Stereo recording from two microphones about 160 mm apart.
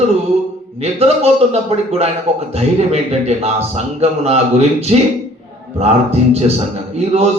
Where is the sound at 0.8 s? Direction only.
40° right (ahead or behind).